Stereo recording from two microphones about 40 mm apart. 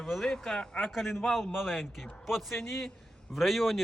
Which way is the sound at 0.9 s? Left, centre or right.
Centre.